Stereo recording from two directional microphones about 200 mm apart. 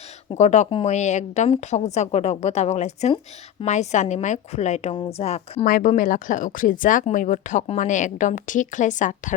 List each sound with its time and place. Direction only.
0.3 s speech: 35° left (ahead or behind)